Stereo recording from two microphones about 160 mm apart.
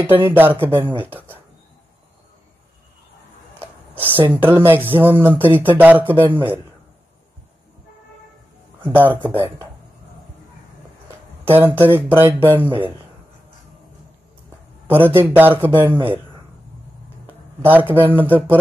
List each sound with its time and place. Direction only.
0.0 s a man's voice: 15° right (ahead or behind)
0.7 s speech: 30° right (ahead or behind)
1.0 s a sound: 10° right (ahead or behind)
3.5 s a sound: 10° right (ahead or behind)
4.2 s a man's voice: 15° right (ahead or behind)
5.3 s speech: 35° right (ahead or behind)
5.6 s a man's voice: 10° right (ahead or behind)
8.8 s a man's voice: 10° right (ahead or behind)
9.3 s speech: 30° right (ahead or behind)
11.4 s a man's voice: 15° right (ahead or behind)
12.6 s speech: 30° right (ahead or behind)
14.9 s a man's voice: 15° right (ahead or behind)
15.9 s speech: 35° right (ahead or behind)
17.3 s speech: 10° right (ahead or behind)